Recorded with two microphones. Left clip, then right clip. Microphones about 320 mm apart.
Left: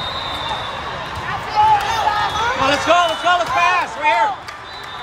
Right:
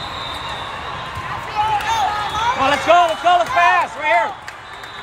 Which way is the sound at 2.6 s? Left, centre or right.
Right.